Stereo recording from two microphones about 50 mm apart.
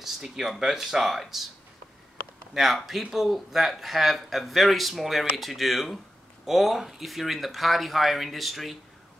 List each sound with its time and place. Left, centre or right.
0.0 s speech: centre
2.5 s speech: centre